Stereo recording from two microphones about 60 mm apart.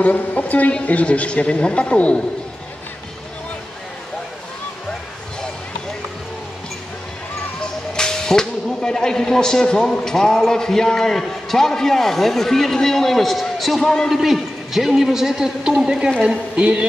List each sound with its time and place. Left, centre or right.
0.0 s a woman's voice: left
7.9 s a man's voice: centre
16.5 s music: centre